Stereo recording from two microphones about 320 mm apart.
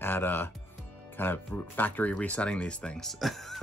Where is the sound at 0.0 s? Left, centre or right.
Centre.